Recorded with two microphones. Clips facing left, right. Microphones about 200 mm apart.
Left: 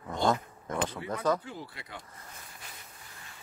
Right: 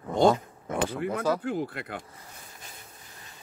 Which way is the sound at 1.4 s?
55° right (ahead or behind).